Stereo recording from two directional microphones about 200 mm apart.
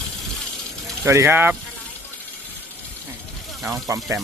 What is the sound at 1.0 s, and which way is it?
Speech, 15° right (ahead or behind).